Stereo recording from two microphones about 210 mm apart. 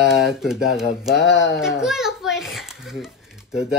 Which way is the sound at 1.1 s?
55° left (ahead or behind).